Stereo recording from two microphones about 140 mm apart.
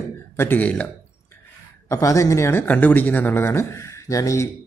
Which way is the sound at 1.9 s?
20° left (ahead or behind).